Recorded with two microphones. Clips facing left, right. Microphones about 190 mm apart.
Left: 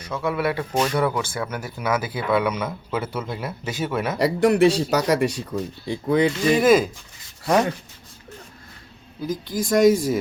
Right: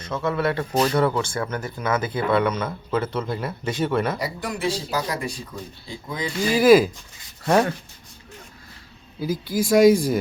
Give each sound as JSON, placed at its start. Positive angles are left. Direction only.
{"t": 0.0, "sound": "speech", "side_deg": 10}
{"t": 4.2, "sound": "speech", "side_deg": 70}
{"t": 6.5, "sound": "speech", "side_deg": 0}
{"t": 9.2, "sound": "speech", "side_deg": -5}